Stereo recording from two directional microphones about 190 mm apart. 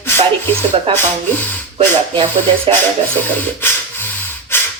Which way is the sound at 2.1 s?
25° right (ahead or behind).